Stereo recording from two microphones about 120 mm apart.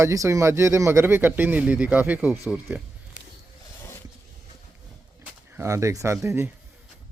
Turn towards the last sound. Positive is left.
turn(degrees=-20)  # may be behind; listen again after turning